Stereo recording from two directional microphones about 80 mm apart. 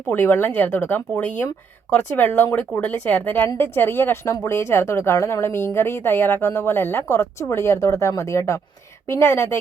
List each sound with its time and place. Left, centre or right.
0.1 s speech: left